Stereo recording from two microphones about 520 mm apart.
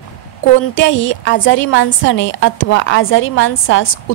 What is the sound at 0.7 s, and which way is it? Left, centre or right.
A woman's voice, left.